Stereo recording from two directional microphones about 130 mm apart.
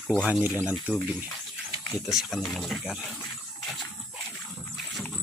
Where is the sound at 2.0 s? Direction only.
Centre (ahead or behind).